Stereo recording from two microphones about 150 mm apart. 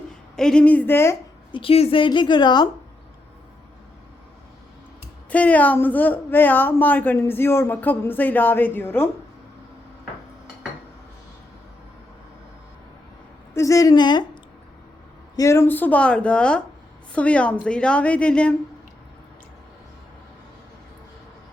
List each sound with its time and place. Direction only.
0.3 s speech: 5° left (ahead or behind)
1.5 s a woman's voice: 40° left (ahead or behind)
5.3 s speech: 10° left (ahead or behind)
13.5 s a woman's voice: 20° left (ahead or behind)
15.4 s speech: 20° left (ahead or behind)